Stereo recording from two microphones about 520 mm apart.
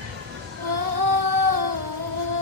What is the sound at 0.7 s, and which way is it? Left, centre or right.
Music, right.